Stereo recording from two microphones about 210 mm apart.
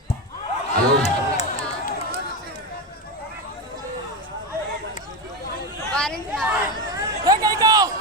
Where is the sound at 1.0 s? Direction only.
30° left (ahead or behind).